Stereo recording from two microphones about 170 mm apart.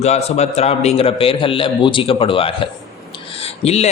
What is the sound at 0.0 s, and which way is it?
Speech, 40° left (ahead or behind).